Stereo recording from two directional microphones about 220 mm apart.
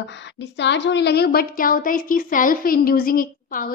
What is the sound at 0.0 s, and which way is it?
A woman's voice, 55° left (ahead or behind).